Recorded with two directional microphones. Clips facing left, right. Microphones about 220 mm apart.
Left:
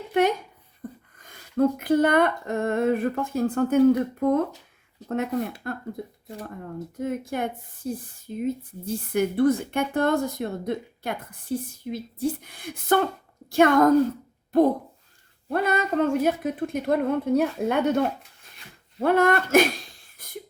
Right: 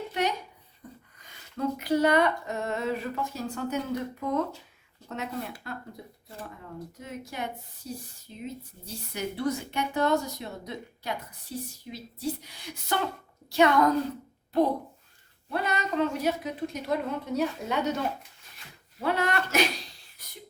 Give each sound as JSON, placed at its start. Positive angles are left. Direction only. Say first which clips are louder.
{"t": 0.1, "sound": "speech", "louder": "left 10 dB", "side_deg": 50}
{"t": 7.0, "sound": "speech", "louder": "left 10 dB", "side_deg": 50}
{"t": 20.2, "sound": "a sound", "louder": "left 6 dB", "side_deg": 50}